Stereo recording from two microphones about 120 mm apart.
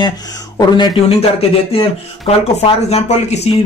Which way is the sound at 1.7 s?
55° left (ahead or behind).